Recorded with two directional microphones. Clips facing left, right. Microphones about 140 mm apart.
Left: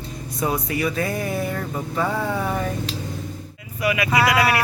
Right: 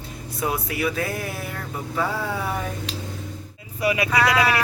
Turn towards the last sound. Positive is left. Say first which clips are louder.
# left 1 dB
turn(degrees=10)  # may be behind; listen again after turning